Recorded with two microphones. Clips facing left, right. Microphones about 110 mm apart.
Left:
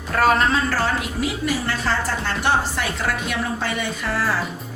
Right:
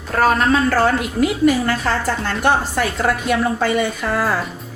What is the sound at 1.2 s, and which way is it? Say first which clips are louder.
A woman's voice: right 11 dB; 55° right (ahead or behind).